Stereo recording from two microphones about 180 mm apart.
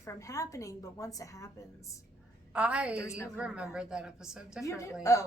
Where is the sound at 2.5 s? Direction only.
5° right (ahead or behind).